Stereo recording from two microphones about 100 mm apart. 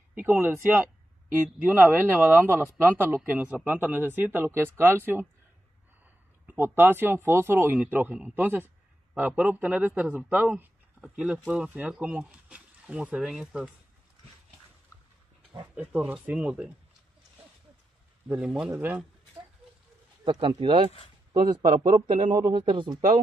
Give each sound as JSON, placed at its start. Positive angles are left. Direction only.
{"t": 0.1, "sound": "speech", "side_deg": -20}
{"t": 6.6, "sound": "speech", "side_deg": -20}
{"t": 15.7, "sound": "speech", "side_deg": -10}
{"t": 18.3, "sound": "speech", "side_deg": -10}
{"t": 20.3, "sound": "speech", "side_deg": -55}
{"t": 22.0, "sound": "speech", "side_deg": -60}